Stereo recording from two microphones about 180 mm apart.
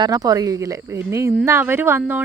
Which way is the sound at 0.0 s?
20° right (ahead or behind).